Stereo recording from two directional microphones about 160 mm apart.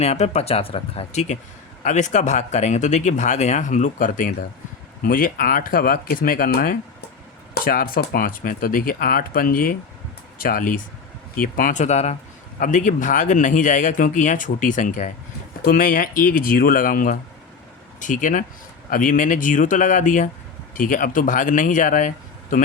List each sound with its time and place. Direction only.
0.0 s speech: 40° left (ahead or behind)
12.5 s speech: 55° left (ahead or behind)